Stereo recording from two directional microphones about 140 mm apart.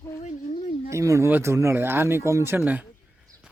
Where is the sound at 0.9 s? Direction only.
20° right (ahead or behind).